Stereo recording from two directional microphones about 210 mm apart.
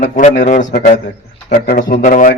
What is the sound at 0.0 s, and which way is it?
A man's voice, 35° left (ahead or behind).